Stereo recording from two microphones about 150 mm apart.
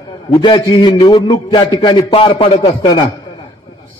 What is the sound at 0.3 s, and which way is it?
A man's voice, 30° left (ahead or behind).